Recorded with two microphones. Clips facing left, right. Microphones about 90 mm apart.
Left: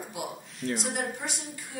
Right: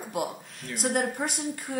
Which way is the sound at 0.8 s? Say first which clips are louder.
Right 5 dB; 50° right (ahead or behind).